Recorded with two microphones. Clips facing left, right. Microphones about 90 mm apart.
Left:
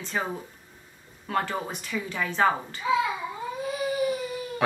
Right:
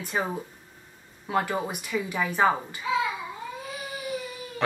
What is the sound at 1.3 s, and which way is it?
A woman's voice, 10° right (ahead or behind).